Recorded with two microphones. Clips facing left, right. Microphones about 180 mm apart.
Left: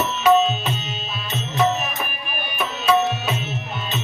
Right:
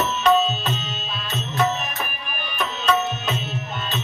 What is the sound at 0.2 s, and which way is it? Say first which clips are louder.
Music: left 3 dB; 10° left (ahead or behind).